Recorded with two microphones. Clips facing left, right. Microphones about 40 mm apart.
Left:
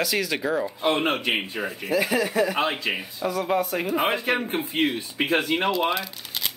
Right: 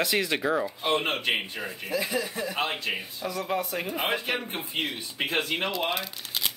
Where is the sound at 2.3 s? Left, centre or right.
Left.